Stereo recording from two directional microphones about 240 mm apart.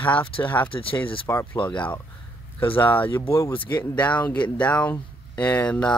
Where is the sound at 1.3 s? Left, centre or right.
Centre.